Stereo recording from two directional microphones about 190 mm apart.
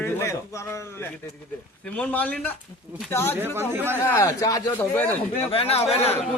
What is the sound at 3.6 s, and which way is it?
Speech, 10° right (ahead or behind).